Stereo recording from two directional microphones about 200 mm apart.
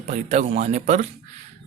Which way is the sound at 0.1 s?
35° right (ahead or behind).